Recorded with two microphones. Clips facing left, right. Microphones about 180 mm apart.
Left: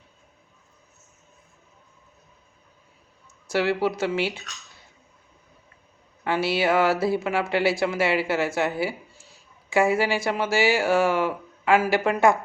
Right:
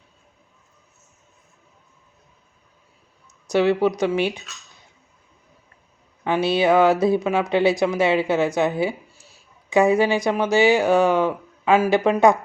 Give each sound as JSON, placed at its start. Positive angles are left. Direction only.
{"t": 3.4, "sound": "speech", "side_deg": -20}
{"t": 6.2, "sound": "speech", "side_deg": -20}